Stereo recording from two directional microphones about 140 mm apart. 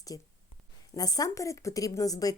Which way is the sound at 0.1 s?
25° left (ahead or behind).